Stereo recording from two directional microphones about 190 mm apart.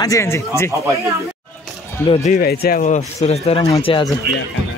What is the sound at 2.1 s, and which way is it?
Speech, 35° left (ahead or behind).